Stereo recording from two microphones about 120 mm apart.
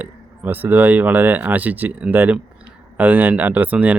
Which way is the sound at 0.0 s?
15° right (ahead or behind).